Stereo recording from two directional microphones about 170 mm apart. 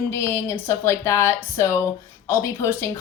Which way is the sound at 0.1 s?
15° left (ahead or behind).